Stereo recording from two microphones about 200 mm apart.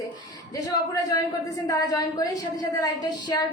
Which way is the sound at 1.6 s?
15° left (ahead or behind).